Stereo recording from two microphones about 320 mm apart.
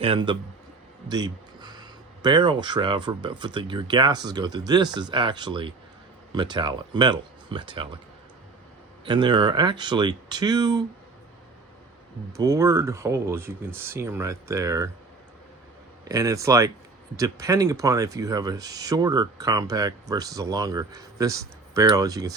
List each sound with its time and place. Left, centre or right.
0.0 s speech: centre
9.0 s speech: centre
12.3 s speech: centre
16.0 s speech: centre